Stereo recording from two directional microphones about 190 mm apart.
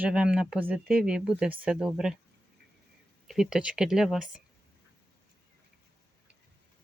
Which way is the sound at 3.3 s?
5° right (ahead or behind).